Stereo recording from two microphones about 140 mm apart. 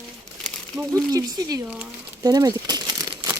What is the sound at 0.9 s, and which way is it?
Speech, 25° right (ahead or behind).